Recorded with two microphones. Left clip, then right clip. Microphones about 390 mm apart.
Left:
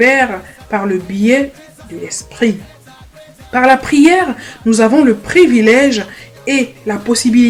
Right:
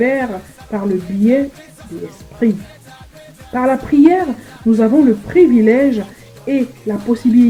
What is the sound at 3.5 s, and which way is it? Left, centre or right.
Speech, left.